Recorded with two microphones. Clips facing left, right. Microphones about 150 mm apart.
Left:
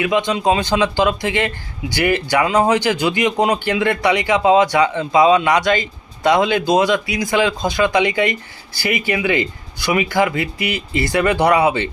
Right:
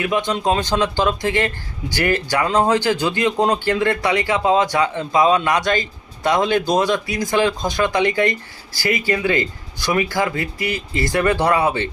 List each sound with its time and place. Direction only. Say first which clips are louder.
0.1 s speech: left 2 dB; 15° left (ahead or behind)